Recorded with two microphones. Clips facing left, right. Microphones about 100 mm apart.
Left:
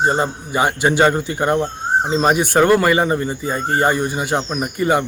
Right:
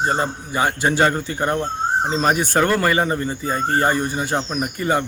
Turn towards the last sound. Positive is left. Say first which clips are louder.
# left 3 dB
turn(degrees=20)  # may be behind; listen again after turning